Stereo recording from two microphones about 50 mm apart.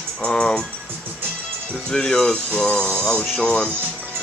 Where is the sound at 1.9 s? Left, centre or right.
Centre.